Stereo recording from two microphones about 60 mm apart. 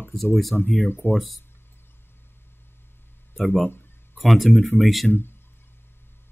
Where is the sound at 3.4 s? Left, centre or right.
Centre.